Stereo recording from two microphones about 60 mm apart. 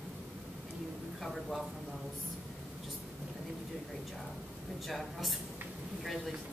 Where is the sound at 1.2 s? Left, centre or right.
Centre.